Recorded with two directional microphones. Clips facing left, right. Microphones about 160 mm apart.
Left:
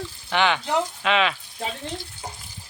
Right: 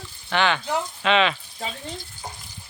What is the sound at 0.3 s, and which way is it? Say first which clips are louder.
Speech: even; 15° left (ahead or behind).